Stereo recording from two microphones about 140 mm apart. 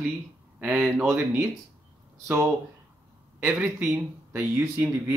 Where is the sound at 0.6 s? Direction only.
10° right (ahead or behind).